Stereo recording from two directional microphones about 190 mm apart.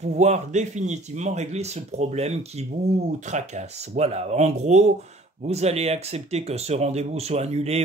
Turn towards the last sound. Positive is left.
turn(degrees=-35)  # may be behind; listen again after turning